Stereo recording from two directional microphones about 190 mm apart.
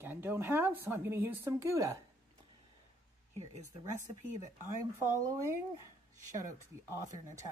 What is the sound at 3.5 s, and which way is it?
Speech, 40° right (ahead or behind).